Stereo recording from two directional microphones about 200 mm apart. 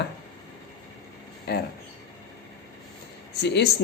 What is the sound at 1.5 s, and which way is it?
Speech, 55° left (ahead or behind).